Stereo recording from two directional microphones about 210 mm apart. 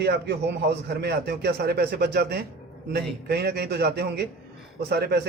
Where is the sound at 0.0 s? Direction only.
50° right (ahead or behind).